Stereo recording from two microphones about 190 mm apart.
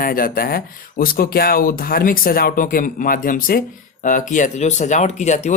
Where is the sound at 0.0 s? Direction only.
50° left (ahead or behind).